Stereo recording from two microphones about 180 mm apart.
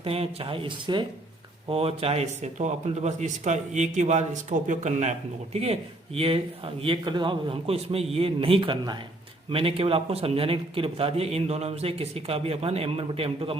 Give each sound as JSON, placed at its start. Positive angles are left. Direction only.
{"t": 0.0, "sound": "a man's voice", "side_deg": -35}